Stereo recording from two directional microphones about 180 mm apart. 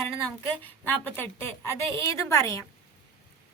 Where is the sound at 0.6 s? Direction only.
10° left (ahead or behind).